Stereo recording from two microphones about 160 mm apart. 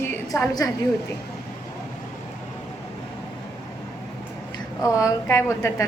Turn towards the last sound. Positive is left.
turn(degrees=20)  # may be behind; listen again after turning